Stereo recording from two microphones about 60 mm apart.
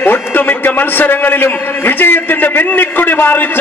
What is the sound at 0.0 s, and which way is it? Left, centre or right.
A man's voice, left.